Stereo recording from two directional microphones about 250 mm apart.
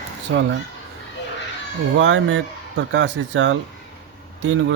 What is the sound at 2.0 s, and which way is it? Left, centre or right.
Speech, right.